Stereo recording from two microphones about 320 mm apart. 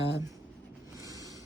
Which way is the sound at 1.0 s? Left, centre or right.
Centre.